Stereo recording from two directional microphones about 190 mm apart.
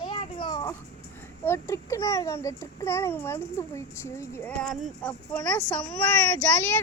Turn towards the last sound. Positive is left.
turn(degrees=10)  # may be behind; listen again after turning